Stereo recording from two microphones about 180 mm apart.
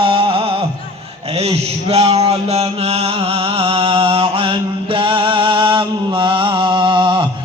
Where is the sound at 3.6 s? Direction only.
35° right (ahead or behind).